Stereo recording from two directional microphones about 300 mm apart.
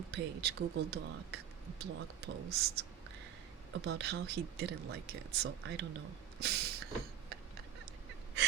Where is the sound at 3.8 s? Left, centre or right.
Right.